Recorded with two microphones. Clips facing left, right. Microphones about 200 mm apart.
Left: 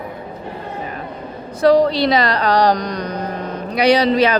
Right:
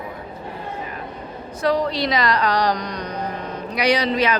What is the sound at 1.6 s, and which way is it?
Speech, 35° left (ahead or behind).